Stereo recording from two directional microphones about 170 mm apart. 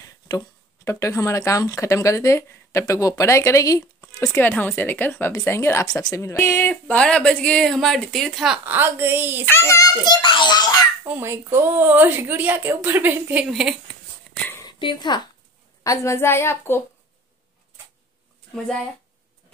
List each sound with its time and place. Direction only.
0.8 s speech: 15° left (ahead or behind); by 9.4 s 10° right (ahead or behind)
9.5 s a child's voice: 15° left (ahead or behind)
11.1 s a woman's voice: 15° right (ahead or behind)
14.5 s dog: 25° left (ahead or behind)
15.8 s speech: 20° left (ahead or behind)
18.5 s speech: centre (ahead or behind)